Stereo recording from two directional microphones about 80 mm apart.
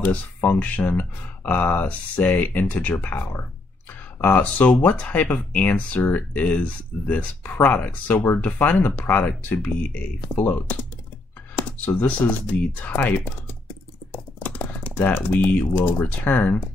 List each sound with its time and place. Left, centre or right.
0.0 s speech: left
14.4 s speech: left